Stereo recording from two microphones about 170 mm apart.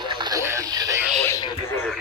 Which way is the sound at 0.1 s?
25° right (ahead or behind).